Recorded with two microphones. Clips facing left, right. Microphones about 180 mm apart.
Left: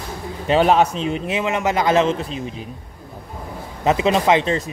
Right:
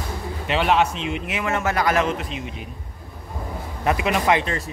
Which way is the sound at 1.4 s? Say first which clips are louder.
Left 2 dB; 20° left (ahead or behind).